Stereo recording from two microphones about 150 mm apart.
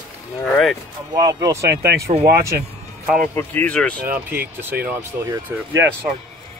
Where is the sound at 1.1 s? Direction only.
25° right (ahead or behind).